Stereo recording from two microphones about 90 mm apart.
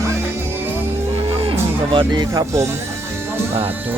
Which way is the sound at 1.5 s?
70° right (ahead or behind).